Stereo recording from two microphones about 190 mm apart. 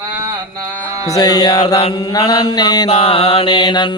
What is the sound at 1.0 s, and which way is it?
Mantra, 20° left (ahead or behind).